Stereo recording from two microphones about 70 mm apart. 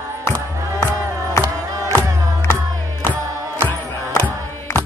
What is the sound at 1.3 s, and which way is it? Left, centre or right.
Music, left.